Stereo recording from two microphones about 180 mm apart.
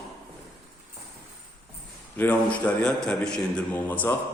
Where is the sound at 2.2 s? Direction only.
10° left (ahead or behind).